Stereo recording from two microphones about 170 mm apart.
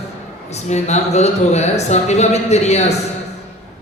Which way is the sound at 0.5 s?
40° left (ahead or behind).